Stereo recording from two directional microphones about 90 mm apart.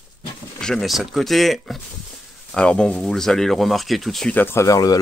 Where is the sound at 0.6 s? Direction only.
Centre (ahead or behind).